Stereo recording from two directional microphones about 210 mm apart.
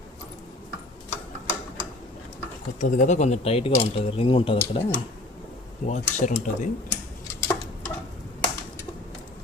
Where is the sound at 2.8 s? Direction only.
35° left (ahead or behind).